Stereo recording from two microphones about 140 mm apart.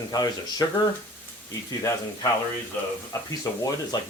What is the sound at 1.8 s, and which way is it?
Speech, 25° left (ahead or behind).